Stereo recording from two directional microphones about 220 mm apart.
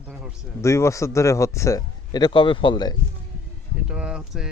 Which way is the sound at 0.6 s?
15° left (ahead or behind).